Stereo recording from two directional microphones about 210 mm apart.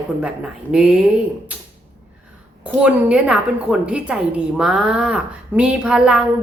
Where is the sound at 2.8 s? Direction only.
5° right (ahead or behind).